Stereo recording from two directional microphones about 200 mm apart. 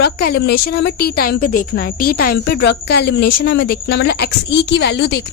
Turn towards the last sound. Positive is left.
turn(degrees=60)  # may be behind; listen again after turning